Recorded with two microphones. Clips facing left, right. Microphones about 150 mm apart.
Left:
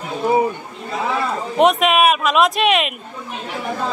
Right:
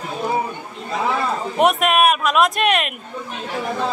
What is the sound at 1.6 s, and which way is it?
Speech, centre (ahead or behind).